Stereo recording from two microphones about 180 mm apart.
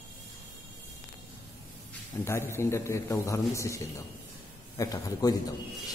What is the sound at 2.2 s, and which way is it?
A man's voice, 15° left (ahead or behind).